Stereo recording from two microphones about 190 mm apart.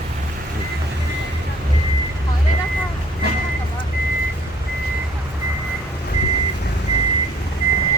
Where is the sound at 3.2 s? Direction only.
60° right (ahead or behind).